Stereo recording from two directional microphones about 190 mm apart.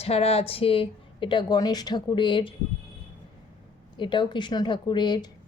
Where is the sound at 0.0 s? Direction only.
30° left (ahead or behind).